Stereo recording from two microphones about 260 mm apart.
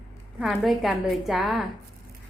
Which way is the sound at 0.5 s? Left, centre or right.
Centre.